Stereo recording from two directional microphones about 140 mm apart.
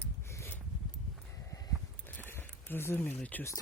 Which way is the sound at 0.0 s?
20° left (ahead or behind).